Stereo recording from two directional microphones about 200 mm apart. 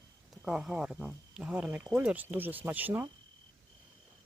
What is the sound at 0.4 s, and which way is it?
Speech, 5° right (ahead or behind).